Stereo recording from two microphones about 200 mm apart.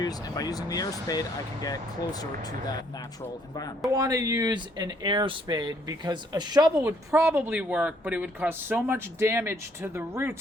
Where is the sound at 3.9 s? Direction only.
15° right (ahead or behind).